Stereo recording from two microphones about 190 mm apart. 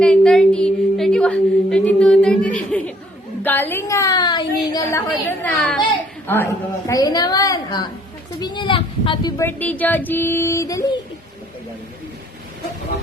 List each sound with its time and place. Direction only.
0.0 s a woman's voice: 5° left (ahead or behind)
5.5 s a woman's voice: centre (ahead or behind); by 9.3 s 25° left (ahead or behind)
9.4 s a woman's voice: 10° left (ahead or behind)